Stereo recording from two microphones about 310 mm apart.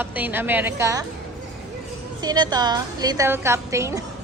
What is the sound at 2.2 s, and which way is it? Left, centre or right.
A woman's voice, centre.